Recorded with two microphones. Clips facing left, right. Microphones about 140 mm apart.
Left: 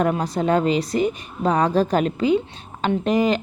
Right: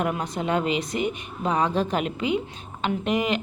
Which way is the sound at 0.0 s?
35° left (ahead or behind).